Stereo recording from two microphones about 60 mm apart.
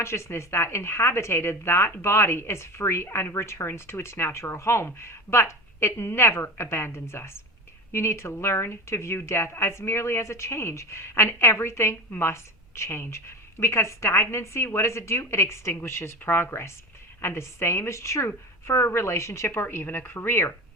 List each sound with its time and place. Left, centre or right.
0.0 s a woman's voice: left
19.5 s speech: left